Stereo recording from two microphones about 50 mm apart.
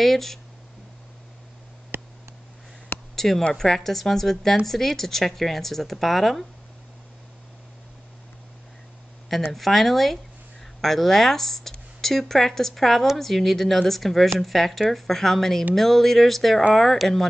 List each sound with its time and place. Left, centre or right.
0.0 s speech: centre
1.9 s a sound: right
3.2 s speech: centre
9.5 s speech: centre